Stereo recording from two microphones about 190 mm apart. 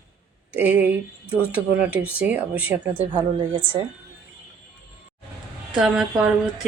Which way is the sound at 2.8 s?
25° right (ahead or behind).